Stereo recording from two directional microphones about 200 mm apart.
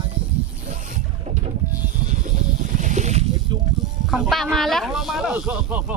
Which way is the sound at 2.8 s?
35° right (ahead or behind).